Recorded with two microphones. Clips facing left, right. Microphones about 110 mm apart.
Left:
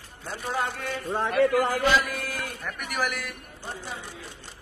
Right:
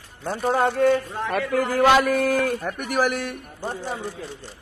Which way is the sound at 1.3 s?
55° right (ahead or behind).